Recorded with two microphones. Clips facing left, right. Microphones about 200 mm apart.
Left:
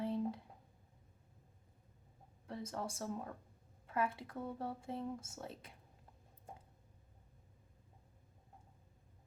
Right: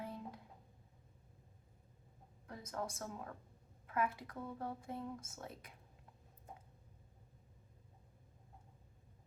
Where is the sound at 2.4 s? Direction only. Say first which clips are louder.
Left 1 dB; 30° left (ahead or behind).